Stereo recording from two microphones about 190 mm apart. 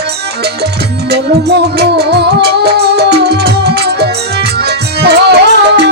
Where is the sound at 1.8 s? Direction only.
60° right (ahead or behind).